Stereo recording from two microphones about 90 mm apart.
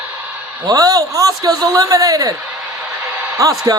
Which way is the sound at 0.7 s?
45° right (ahead or behind).